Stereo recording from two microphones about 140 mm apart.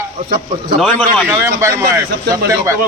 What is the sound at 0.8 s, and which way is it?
Speech, 5° left (ahead or behind).